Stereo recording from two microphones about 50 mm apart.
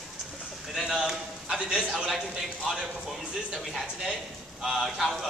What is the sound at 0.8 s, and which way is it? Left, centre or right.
Clip-clop, centre.